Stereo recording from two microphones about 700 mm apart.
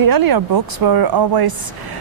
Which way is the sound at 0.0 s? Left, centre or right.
Right.